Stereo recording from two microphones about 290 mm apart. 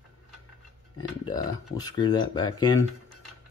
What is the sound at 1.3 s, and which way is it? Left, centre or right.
Speech, centre.